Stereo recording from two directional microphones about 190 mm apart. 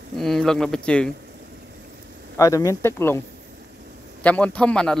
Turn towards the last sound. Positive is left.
turn(degrees=5)  # may be behind; listen again after turning